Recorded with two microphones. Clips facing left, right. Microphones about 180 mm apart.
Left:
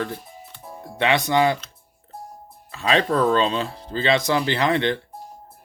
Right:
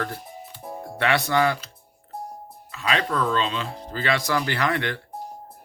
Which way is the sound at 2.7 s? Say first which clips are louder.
Left 5 dB; 30° left (ahead or behind).